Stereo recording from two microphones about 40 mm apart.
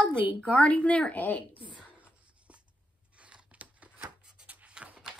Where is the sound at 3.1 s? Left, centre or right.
Right.